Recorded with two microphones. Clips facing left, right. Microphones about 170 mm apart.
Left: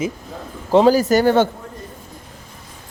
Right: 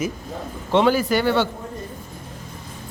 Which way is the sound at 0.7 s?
40° left (ahead or behind).